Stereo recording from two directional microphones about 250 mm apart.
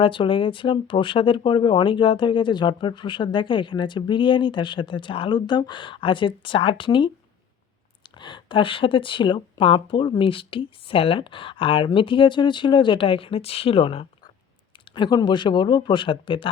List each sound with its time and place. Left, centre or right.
0.0 s speech: centre
8.2 s speech: centre